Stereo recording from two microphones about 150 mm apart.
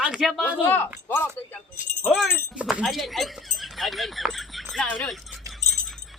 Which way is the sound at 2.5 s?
10° right (ahead or behind).